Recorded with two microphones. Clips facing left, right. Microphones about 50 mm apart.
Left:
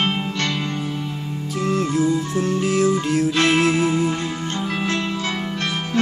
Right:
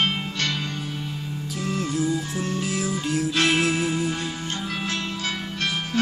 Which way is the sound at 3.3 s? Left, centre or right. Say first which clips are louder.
Left 3 dB; left.